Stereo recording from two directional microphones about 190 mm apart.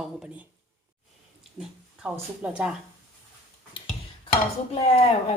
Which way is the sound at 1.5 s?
5° right (ahead or behind).